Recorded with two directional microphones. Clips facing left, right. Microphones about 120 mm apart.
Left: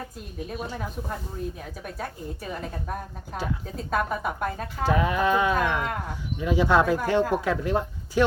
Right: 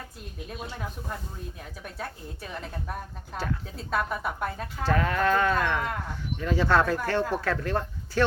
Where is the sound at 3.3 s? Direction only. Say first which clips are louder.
Left 1 dB; 10° left (ahead or behind).